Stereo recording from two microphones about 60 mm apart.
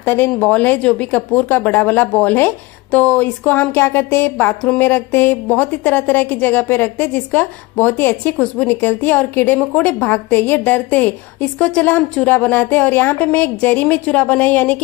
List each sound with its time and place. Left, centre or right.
0.0 s speech: left
4.7 s a sound: left
5.5 s speech: left
9.8 s speech: left